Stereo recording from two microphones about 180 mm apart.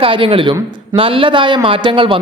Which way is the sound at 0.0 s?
30° right (ahead or behind).